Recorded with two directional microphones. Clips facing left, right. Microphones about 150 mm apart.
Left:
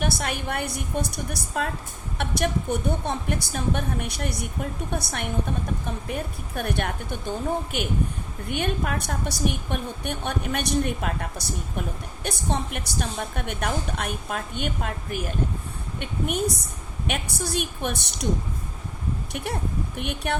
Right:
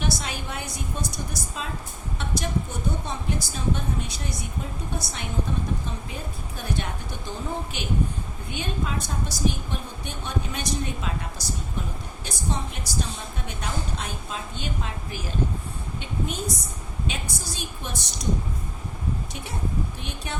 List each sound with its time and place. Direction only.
0.0 s a woman's voice: 55° left (ahead or behind)
19.3 s a woman's voice: 60° left (ahead or behind)